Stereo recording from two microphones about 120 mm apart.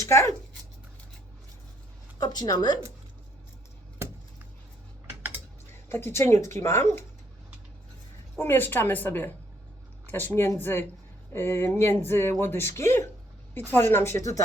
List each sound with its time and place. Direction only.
0.0 s speech: 25° left (ahead or behind)
2.1 s a woman's voice: 35° left (ahead or behind)
3.9 s a sound: 20° right (ahead or behind)
5.0 s typing: 15° right (ahead or behind)
5.9 s speech: 20° left (ahead or behind)
8.4 s speech: 20° left (ahead or behind)